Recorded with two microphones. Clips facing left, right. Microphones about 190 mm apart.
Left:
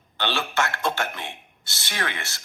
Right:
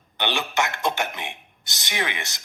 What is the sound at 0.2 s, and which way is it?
A man's voice, 15° right (ahead or behind).